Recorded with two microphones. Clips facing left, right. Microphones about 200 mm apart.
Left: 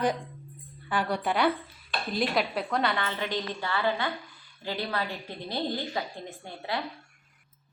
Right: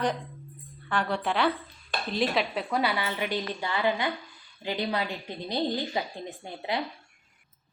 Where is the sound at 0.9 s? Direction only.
5° left (ahead or behind); by 6.8 s 20° right (ahead or behind).